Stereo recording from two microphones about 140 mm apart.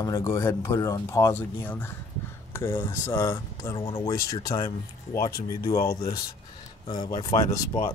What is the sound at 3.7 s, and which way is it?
Speech, 40° left (ahead or behind).